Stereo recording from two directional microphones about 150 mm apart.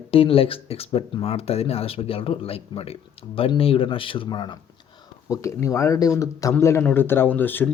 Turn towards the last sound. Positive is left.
turn(degrees=15)  # may be behind; listen again after turning